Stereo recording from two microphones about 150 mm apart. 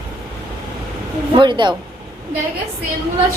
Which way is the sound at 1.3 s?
30° right (ahead or behind).